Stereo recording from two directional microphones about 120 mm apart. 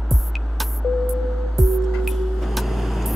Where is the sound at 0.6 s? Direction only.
Centre (ahead or behind).